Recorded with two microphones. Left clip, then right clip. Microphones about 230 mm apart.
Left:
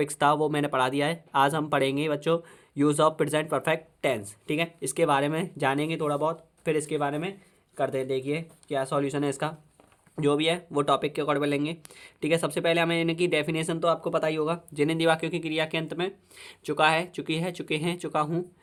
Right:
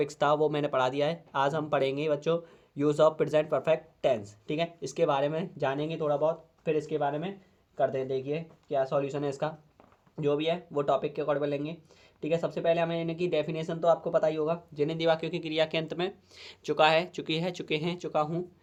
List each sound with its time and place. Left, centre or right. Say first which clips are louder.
0.0 s speech: left 2 dB; left